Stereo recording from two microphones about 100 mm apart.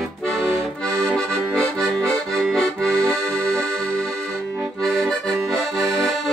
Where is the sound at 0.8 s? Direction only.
10° left (ahead or behind).